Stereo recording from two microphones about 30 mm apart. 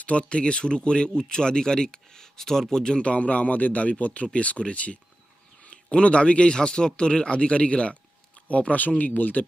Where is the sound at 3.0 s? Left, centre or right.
Left.